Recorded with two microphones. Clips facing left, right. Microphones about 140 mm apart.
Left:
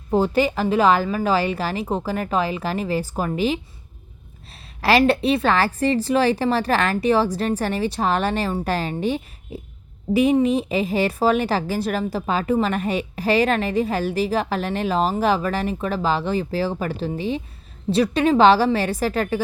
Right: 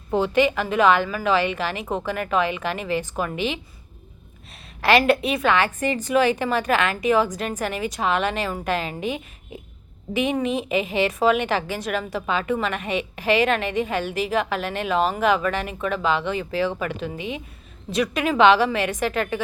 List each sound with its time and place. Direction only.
0.1 s a woman's voice: 35° left (ahead or behind)
4.8 s a woman's voice: 35° left (ahead or behind)